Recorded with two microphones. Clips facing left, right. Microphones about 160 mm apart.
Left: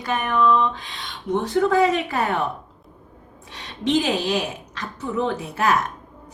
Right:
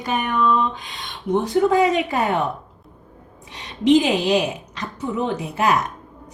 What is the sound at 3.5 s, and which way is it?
Speech, 15° right (ahead or behind).